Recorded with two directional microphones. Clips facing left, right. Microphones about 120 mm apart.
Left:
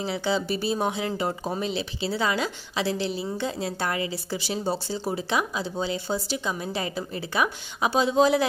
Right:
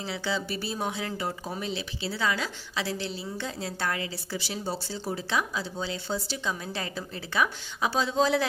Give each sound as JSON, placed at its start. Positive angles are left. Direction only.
{"t": 0.2, "sound": "a woman's voice", "side_deg": 20}